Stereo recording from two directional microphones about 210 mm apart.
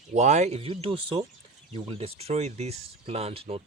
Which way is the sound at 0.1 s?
35° right (ahead or behind).